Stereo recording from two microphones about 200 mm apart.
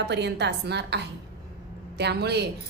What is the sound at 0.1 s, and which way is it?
A woman's voice, 60° right (ahead or behind).